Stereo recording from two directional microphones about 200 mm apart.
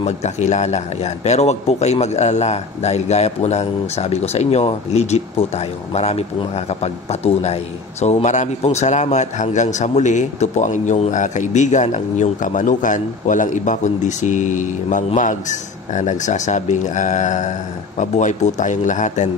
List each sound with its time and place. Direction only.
0.0 s a man's voice: 35° left (ahead or behind)